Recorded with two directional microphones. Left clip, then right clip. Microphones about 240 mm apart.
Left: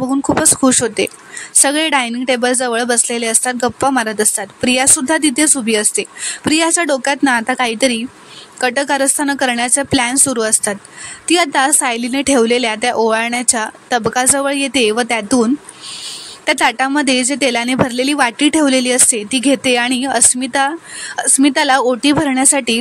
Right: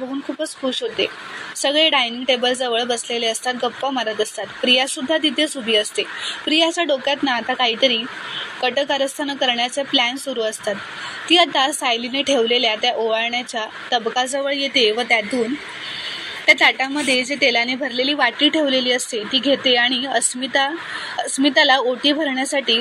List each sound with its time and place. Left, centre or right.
0.7 s a woman's voice: left
16.4 s a woman's voice: left